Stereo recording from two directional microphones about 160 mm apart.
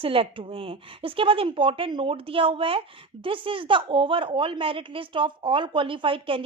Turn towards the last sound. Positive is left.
turn(degrees=-35)  # may be behind; listen again after turning